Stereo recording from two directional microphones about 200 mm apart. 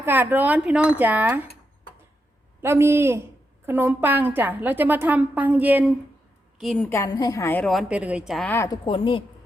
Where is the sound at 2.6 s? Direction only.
10° right (ahead or behind).